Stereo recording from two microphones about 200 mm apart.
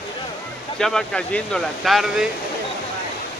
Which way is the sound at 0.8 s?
5° left (ahead or behind).